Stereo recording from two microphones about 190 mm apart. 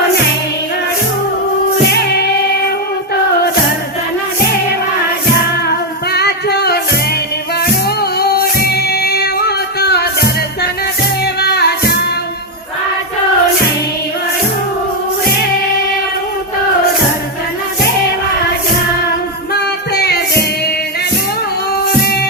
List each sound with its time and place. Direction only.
6.1 s music: 60° left (ahead or behind)
8.2 s music: 55° left (ahead or behind)
19.5 s music: 60° left (ahead or behind)